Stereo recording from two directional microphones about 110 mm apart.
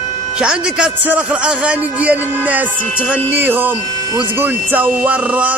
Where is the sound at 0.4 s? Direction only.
10° right (ahead or behind).